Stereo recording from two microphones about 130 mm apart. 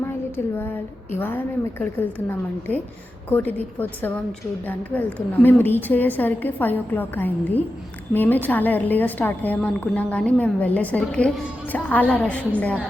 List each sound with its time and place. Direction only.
0.0 s a woman's voice: 15° left (ahead or behind)